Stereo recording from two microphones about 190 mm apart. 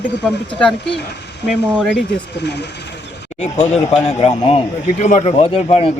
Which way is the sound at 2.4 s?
60° left (ahead or behind).